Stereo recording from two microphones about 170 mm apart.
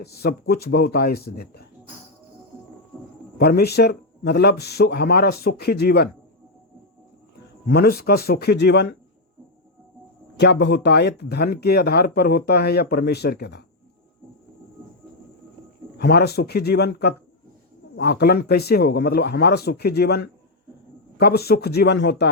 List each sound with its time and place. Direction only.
0.0 s speech: 70° left (ahead or behind)
3.3 s speech: 70° left (ahead or behind)
7.7 s speech: 65° left (ahead or behind)
10.3 s speech: 80° left
16.0 s speech: 70° left (ahead or behind); by 22.3 s 90° left